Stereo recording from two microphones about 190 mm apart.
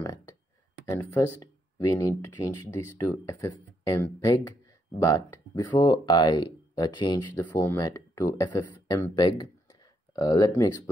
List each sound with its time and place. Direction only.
0.8 s speech: 15° left (ahead or behind)